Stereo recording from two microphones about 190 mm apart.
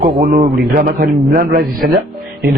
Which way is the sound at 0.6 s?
55° right (ahead or behind).